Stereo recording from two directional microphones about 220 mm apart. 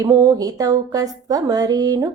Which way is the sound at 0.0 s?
15° right (ahead or behind).